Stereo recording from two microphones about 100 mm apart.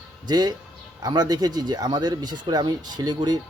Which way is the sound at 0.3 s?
45° right (ahead or behind).